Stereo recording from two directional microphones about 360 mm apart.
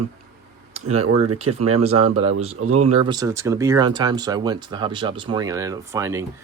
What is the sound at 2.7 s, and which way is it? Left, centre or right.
Speech, centre.